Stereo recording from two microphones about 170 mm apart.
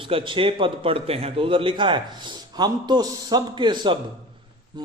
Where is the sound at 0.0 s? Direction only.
30° right (ahead or behind).